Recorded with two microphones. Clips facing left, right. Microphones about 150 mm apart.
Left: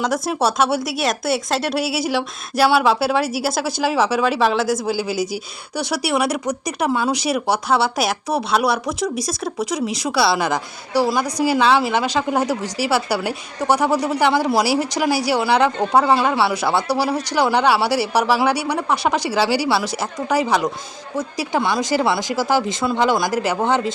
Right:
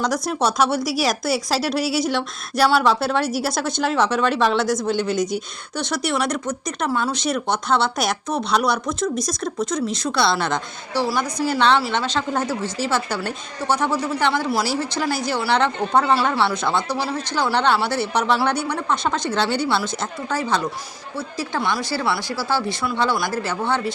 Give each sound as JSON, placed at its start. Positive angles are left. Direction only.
{"t": 0.0, "sound": "a woman's voice", "side_deg": 5}